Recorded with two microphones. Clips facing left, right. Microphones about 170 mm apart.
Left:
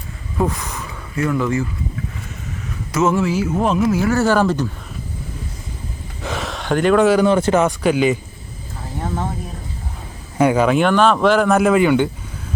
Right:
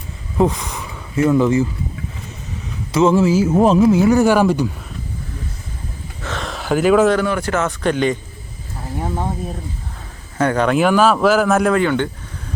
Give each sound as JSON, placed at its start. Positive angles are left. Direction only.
{"t": 0.3, "sound": "speech", "side_deg": -15}
{"t": 2.9, "sound": "speech", "side_deg": -30}
{"t": 6.2, "sound": "a sound", "side_deg": 10}
{"t": 6.5, "sound": "speech", "side_deg": -5}
{"t": 7.3, "sound": "speech", "side_deg": 25}
{"t": 7.8, "sound": "a man's voice", "side_deg": 5}
{"t": 9.0, "sound": "speech", "side_deg": -10}
{"t": 10.3, "sound": "speech", "side_deg": 10}